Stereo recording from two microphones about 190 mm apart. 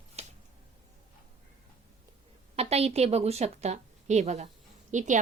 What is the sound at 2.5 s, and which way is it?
A woman's voice, 35° right (ahead or behind).